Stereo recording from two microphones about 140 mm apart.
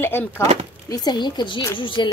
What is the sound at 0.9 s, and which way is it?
Speech, 30° left (ahead or behind).